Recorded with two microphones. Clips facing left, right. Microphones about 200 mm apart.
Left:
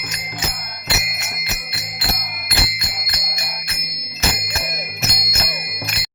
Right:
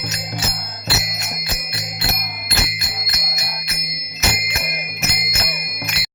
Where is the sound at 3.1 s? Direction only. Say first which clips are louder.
Right 1 dB; 30° left (ahead or behind).